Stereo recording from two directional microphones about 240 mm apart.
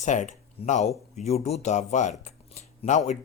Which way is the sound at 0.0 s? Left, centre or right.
Left.